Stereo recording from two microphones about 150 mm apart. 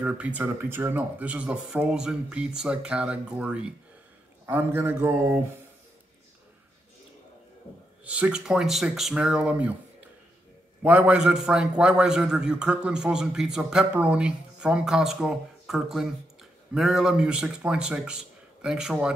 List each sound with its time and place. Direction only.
0.0 s speech: 10° right (ahead or behind)
8.0 s a man's voice: 10° right (ahead or behind)
10.8 s a man's voice: 10° right (ahead or behind)